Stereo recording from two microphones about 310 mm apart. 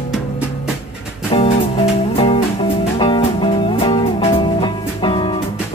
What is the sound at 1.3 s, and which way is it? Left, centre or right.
Music, centre.